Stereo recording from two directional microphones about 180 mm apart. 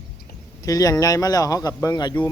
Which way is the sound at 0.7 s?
20° left (ahead or behind).